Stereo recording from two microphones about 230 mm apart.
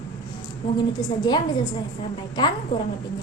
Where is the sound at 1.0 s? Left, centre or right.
Centre.